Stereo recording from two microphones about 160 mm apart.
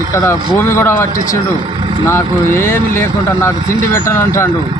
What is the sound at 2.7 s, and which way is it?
Speech, 15° left (ahead or behind).